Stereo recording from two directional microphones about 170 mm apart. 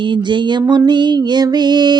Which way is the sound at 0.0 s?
30° right (ahead or behind).